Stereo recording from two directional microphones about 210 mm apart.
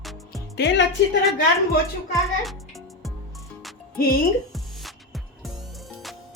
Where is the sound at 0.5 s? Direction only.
55° left (ahead or behind).